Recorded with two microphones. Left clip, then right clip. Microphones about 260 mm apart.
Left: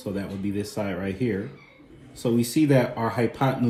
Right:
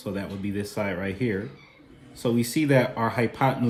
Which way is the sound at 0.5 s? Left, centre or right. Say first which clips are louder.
Even; right.